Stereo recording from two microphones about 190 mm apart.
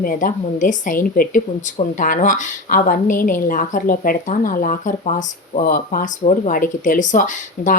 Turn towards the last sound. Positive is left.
turn(degrees=45)  # may be behind; listen again after turning